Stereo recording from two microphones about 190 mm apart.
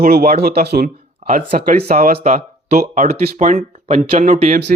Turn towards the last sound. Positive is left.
turn(degrees=-40)  # may be behind; listen again after turning